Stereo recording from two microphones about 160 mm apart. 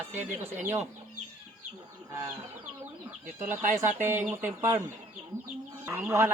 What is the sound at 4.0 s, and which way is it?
Speech, 15° right (ahead or behind).